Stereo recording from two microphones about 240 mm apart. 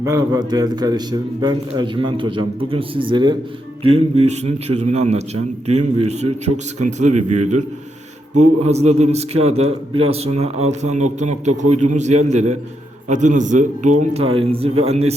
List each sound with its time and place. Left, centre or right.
0.0 s a man's voice: centre